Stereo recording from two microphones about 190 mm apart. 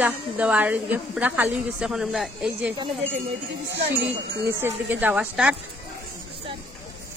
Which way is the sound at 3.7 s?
65° right (ahead or behind).